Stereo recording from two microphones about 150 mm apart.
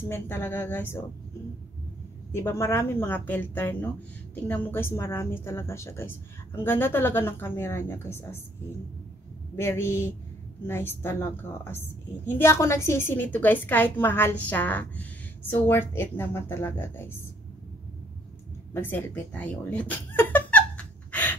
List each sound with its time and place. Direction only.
0.1 s a woman's voice: 15° left (ahead or behind)
2.3 s a woman's voice: 15° left (ahead or behind)
9.6 s a woman's voice: 15° left (ahead or behind)
18.7 s a sound: 15° left (ahead or behind)